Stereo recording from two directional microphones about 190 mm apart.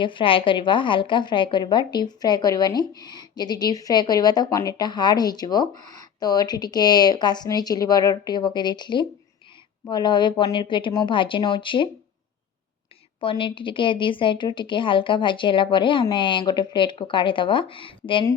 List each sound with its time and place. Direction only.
0.0 s a woman's voice: 25° left (ahead or behind)
13.1 s a woman's voice: 25° left (ahead or behind)